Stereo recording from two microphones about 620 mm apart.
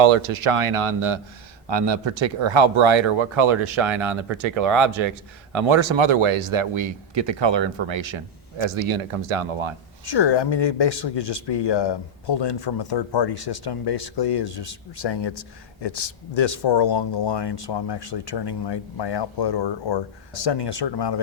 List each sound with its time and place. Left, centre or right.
0.0 s speech: right
10.1 s speech: left